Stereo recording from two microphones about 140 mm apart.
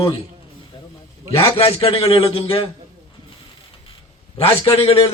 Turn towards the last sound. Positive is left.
turn(degrees=45)  # may be behind; listen again after turning